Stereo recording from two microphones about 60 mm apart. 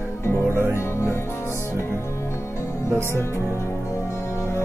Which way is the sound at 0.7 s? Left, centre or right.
Left.